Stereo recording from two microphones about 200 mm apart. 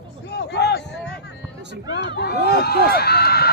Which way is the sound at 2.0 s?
55° left (ahead or behind).